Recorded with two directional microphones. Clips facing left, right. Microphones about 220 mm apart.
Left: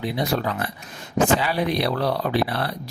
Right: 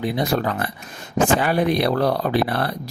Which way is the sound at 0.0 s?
50° right (ahead or behind).